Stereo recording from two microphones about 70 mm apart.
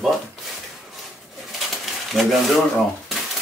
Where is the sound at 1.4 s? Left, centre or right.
Centre.